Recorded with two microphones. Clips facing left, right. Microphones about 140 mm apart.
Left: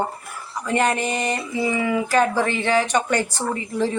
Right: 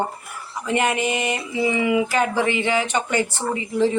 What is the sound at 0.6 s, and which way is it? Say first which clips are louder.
Speech: even; 15° right (ahead or behind).